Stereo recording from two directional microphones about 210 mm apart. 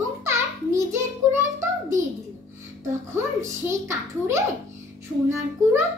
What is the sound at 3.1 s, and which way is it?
A child's voice, 15° right (ahead or behind).